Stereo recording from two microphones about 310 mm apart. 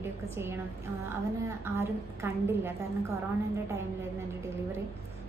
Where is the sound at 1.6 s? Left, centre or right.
Centre.